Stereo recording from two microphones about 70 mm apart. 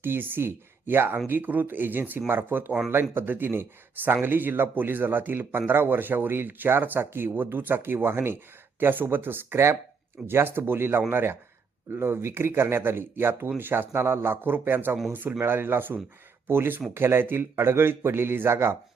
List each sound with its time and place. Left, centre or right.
0.0 s speech: right